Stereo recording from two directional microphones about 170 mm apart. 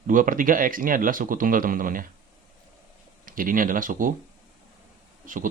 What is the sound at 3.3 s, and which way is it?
Speech, 55° right (ahead or behind).